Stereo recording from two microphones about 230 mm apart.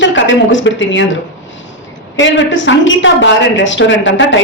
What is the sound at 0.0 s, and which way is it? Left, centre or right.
A woman's voice, left.